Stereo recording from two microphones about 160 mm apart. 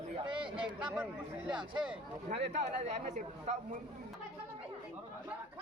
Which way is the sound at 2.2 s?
45° right (ahead or behind).